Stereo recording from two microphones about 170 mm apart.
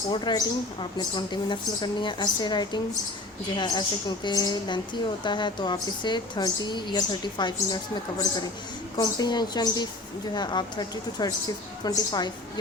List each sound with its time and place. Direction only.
0.1 s a woman's voice: 30° left (ahead or behind)
9.0 s a woman's voice: 25° left (ahead or behind)